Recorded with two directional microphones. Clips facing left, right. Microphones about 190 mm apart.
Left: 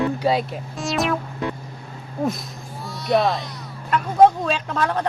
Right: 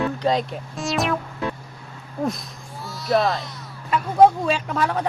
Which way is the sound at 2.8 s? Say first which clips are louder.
Left 1 dB; centre (ahead or behind).